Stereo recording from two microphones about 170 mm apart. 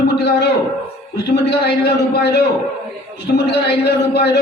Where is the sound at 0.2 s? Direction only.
85° left.